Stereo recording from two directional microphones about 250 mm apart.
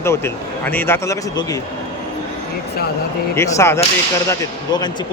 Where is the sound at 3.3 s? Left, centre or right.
Centre.